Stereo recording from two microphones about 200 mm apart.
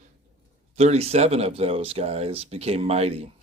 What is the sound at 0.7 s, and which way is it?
Speech, 30° right (ahead or behind).